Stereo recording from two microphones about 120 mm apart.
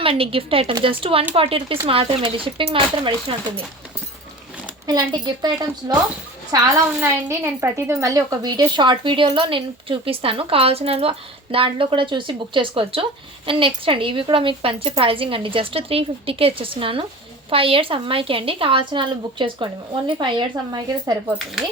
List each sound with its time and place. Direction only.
0.0 s a woman's voice: 50° right (ahead or behind)
4.9 s a woman's voice: 35° right (ahead or behind)